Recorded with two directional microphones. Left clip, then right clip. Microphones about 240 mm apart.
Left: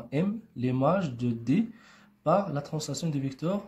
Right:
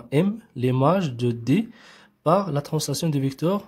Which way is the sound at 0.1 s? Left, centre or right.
Right.